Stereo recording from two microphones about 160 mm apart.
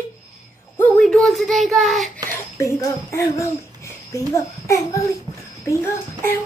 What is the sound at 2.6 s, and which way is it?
A child's voice, 20° left (ahead or behind).